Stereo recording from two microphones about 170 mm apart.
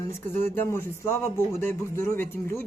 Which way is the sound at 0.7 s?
15° left (ahead or behind).